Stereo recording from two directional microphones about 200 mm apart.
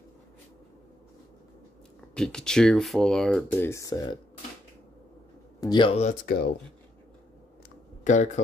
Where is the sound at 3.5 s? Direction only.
15° left (ahead or behind).